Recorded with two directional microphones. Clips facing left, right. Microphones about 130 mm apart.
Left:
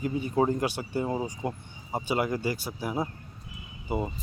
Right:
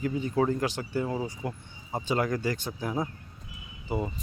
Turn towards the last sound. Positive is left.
turn(degrees=15)  # may be behind; listen again after turning